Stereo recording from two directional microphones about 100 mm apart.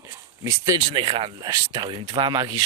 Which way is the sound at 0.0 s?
35° right (ahead or behind).